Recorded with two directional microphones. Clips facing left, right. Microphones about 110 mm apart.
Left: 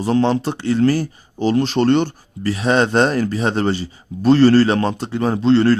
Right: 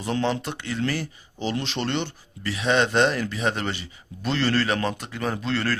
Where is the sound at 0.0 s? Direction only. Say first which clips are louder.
Left 9 dB; 35° left (ahead or behind).